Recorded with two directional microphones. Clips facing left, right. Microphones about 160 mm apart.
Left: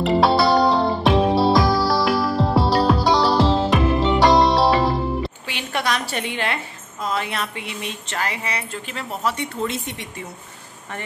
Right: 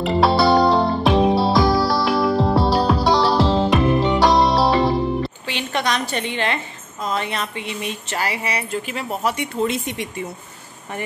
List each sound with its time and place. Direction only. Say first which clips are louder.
0.0 s music: even; centre (ahead or behind)
8.1 s speech: right 2 dB; 10° right (ahead or behind)